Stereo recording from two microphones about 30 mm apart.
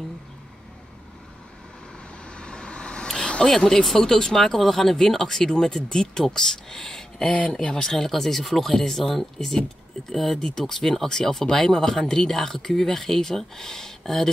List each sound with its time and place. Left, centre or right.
2.2 s vehicle: left
3.2 s a sound: left
3.4 s speech: centre
7.2 s speech: left
7.7 s speech: centre